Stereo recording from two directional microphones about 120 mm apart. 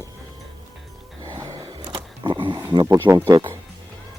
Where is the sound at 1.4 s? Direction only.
35° right (ahead or behind).